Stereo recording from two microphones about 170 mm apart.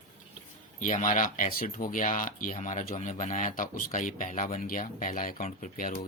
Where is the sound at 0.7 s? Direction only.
50° left (ahead or behind).